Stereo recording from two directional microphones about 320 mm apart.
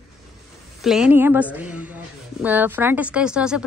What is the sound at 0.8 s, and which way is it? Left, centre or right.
Speech, centre.